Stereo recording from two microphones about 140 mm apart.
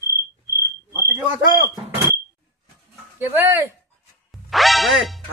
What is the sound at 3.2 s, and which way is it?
Speech, 15° right (ahead or behind).